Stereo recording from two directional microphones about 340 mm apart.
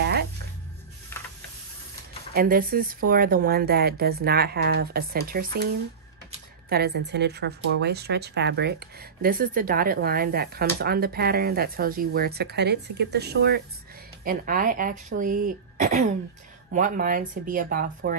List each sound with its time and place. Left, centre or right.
2.3 s speech: right
6.7 s speech: right